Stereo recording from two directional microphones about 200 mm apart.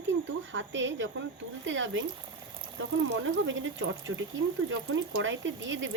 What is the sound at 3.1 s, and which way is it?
Speech, 70° right (ahead or behind).